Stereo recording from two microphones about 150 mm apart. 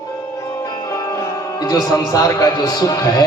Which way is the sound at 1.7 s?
25° left (ahead or behind).